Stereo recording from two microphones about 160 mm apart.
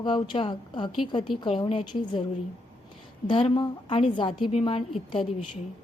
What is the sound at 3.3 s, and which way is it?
A woman's voice, 35° left (ahead or behind).